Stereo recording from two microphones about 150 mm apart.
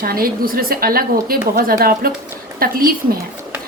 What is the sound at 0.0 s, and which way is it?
A woman's voice, 80° right.